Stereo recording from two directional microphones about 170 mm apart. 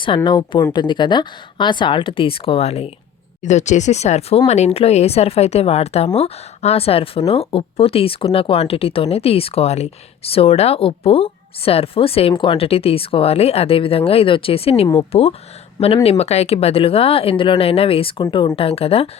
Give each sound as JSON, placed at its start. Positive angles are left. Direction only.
{"t": 0.3, "sound": "speech", "side_deg": 30}